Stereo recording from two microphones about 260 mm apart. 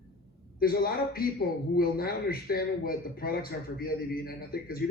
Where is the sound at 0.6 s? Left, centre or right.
Left.